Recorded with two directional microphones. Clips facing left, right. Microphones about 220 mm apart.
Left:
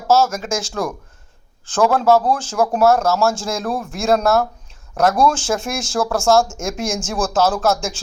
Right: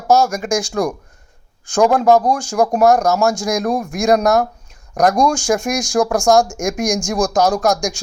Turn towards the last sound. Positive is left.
turn(degrees=-15)  # may be behind; listen again after turning